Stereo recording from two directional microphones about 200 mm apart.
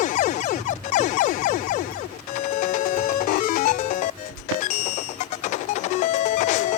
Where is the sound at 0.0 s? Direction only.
40° left (ahead or behind).